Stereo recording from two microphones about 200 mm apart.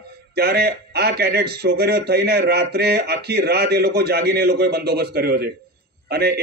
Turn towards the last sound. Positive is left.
turn(degrees=-50)  # may be behind; listen again after turning